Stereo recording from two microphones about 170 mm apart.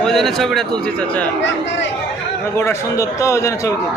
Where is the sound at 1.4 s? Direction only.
90° left.